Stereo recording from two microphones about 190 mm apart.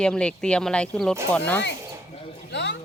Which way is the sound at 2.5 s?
65° left (ahead or behind).